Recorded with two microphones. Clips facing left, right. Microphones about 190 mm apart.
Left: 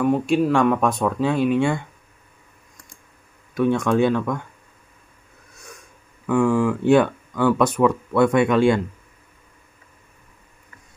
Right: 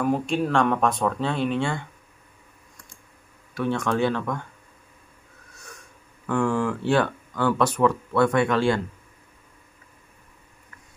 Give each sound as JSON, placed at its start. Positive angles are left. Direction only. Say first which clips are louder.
{"t": 0.0, "sound": "speech", "louder": "left 5 dB", "side_deg": 5}
{"t": 3.5, "sound": "speech", "louder": "left 6 dB", "side_deg": 15}
{"t": 6.2, "sound": "speech", "louder": "left 5 dB", "side_deg": 5}